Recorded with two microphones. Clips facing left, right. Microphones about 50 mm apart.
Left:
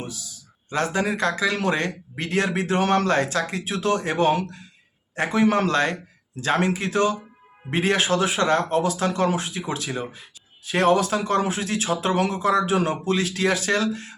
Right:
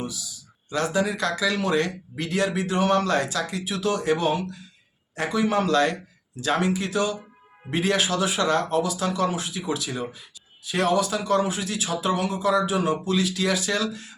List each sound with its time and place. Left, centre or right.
0.0 s speech: left